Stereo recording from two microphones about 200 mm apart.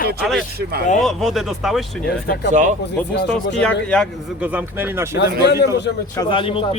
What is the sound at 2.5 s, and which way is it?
Speech, 40° right (ahead or behind).